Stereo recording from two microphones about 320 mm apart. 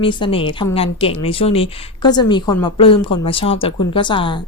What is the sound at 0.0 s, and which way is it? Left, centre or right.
Speech, centre.